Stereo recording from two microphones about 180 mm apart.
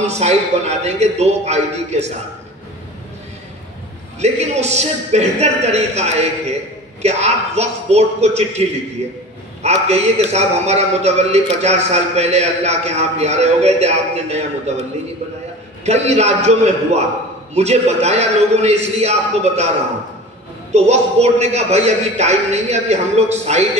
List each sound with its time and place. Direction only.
0.0 s a man's voice: 35° right (ahead or behind)
4.2 s a man's voice: 35° right (ahead or behind)
15.8 s a man's voice: 40° right (ahead or behind)
20.7 s a man's voice: 35° right (ahead or behind)